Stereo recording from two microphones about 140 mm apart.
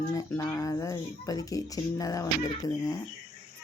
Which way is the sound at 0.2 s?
25° left (ahead or behind).